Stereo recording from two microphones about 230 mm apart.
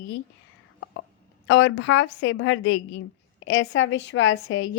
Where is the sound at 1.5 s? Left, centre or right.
Left.